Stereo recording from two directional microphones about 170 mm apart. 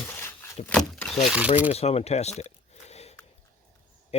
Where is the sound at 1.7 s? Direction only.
35° left (ahead or behind).